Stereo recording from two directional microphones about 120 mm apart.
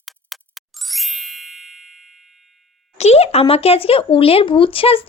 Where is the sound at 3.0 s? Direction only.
60° left (ahead or behind).